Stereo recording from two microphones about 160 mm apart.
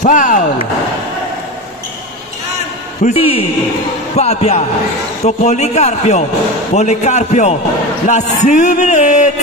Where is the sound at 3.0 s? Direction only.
35° left (ahead or behind).